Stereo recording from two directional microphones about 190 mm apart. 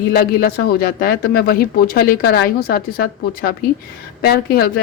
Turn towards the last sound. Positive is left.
turn(degrees=55)  # may be behind; listen again after turning